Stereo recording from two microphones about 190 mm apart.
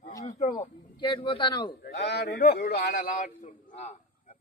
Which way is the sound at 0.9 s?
25° left (ahead or behind).